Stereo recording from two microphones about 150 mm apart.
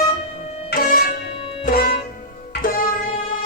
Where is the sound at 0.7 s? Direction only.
85° left.